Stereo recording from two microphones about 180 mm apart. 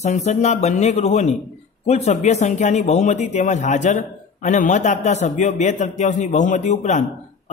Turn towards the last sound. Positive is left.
turn(degrees=40)  # may be behind; listen again after turning